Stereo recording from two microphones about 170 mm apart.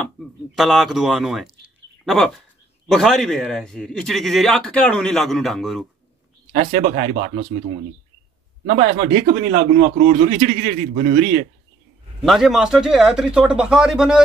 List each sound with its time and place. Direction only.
0.0 s a man's voice: centre (ahead or behind)
7.0 s a man's voice: 45° right (ahead or behind)
8.6 s a man's voice: 45° right (ahead or behind)
12.2 s a man's voice: centre (ahead or behind)